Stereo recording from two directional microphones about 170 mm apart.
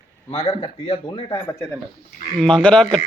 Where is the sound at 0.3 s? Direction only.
30° left (ahead or behind).